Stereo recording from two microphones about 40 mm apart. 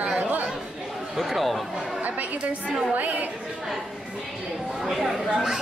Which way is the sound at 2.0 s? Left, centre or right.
Right.